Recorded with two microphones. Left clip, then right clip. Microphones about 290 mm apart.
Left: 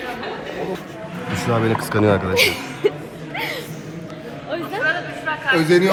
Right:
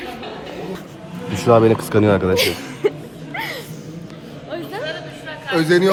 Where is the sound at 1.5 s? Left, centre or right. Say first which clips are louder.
Right 8 dB; centre.